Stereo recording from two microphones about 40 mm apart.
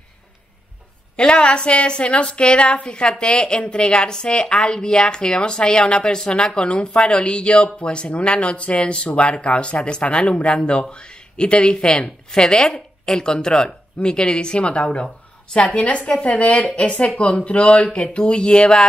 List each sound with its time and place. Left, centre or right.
1.1 s a woman's voice: left